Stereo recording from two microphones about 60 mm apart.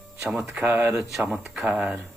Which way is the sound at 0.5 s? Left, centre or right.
Right.